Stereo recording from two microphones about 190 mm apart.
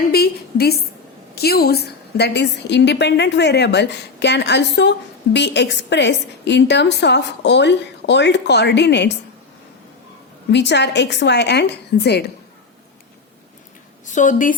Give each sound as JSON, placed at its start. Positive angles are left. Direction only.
{"t": 0.1, "sound": "a woman's voice", "side_deg": 55}
{"t": 10.5, "sound": "a woman's voice", "side_deg": 65}
{"t": 14.1, "sound": "a woman's voice", "side_deg": 40}